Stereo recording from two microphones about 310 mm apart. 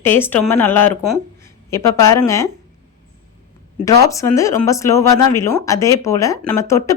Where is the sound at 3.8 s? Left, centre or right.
Centre.